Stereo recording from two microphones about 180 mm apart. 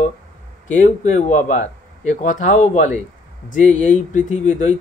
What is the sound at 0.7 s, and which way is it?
Speech, 45° left (ahead or behind).